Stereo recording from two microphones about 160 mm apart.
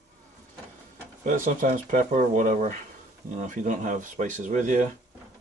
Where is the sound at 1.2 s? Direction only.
50° right (ahead or behind).